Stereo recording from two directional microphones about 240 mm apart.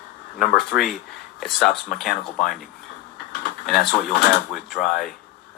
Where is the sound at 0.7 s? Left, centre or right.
Left.